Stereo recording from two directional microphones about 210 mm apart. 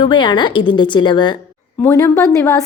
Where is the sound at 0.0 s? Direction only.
20° left (ahead or behind).